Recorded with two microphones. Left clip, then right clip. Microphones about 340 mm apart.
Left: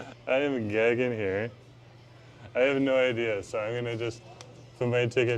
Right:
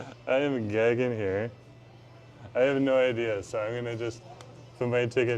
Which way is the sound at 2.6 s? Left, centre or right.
Right.